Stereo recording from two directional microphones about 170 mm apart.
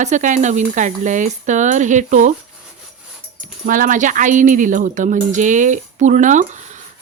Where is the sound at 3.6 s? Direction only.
50° right (ahead or behind).